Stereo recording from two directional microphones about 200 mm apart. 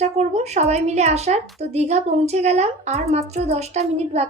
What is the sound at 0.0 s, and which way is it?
A child's voice, 35° right (ahead or behind).